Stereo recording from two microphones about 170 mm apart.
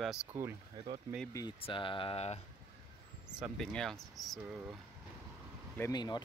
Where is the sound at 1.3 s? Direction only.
30° left (ahead or behind).